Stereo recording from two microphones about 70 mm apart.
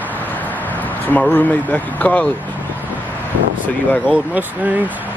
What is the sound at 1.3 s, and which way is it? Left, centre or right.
Speech, left.